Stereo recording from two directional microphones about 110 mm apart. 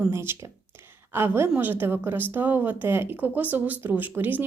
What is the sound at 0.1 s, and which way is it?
A woman's voice, 25° right (ahead or behind).